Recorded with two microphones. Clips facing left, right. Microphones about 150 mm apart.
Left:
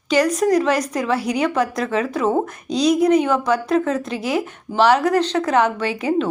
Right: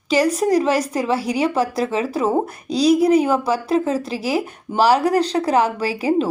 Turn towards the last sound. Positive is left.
turn(degrees=-35)  # may be behind; listen again after turning